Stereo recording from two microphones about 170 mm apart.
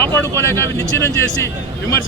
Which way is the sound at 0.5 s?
20° right (ahead or behind).